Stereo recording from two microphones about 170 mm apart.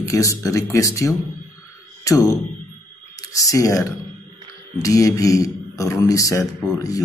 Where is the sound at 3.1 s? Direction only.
20° left (ahead or behind).